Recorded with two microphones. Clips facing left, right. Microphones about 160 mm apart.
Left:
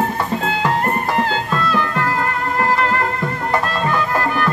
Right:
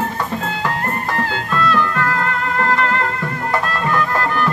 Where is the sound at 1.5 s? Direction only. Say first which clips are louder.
Right 1 dB; 10° left (ahead or behind).